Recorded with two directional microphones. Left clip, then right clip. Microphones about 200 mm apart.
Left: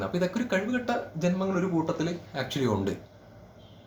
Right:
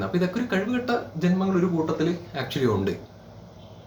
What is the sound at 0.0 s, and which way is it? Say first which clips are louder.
Speech: right 3 dB; 10° left (ahead or behind).